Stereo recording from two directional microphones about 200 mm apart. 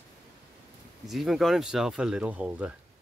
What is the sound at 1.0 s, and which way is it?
Speech, centre (ahead or behind).